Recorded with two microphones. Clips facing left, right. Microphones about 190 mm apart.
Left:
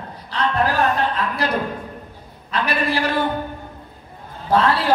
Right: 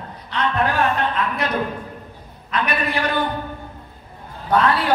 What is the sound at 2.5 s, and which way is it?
Speech, 30° left (ahead or behind).